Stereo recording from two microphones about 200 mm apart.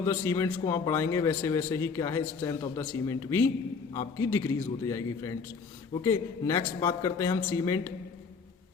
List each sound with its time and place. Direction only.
0.0 s a man's voice: 15° left (ahead or behind)